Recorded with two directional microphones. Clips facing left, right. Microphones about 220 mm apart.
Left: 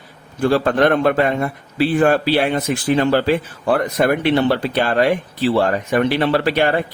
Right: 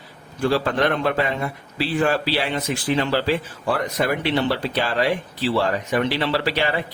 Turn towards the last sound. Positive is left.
turn(degrees=50)  # may be behind; listen again after turning